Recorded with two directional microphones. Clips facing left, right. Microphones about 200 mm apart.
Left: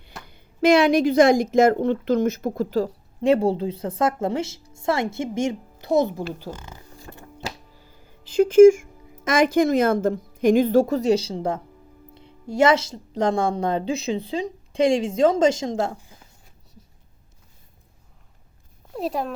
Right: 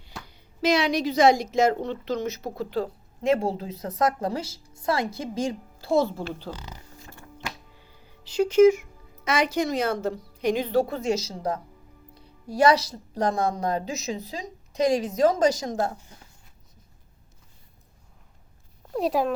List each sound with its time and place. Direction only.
0.3 s a woman's voice: 55° left (ahead or behind); by 6.5 s 15° left (ahead or behind)
7.1 s music: 45° left (ahead or behind)
7.4 s a woman's voice: 40° left (ahead or behind); by 15.9 s 25° left (ahead or behind)
18.9 s speech: centre (ahead or behind)